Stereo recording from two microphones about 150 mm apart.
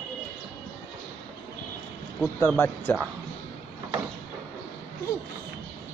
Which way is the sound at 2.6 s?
15° left (ahead or behind).